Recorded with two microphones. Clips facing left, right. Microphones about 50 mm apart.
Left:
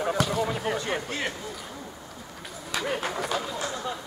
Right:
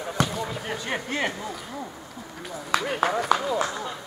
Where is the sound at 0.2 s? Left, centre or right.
Centre.